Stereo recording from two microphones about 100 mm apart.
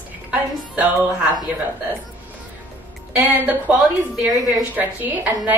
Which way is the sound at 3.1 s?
15° right (ahead or behind).